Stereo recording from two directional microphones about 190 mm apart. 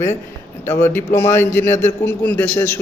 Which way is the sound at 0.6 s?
15° left (ahead or behind).